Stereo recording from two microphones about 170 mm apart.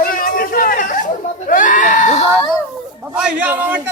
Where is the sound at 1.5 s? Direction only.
50° left (ahead or behind).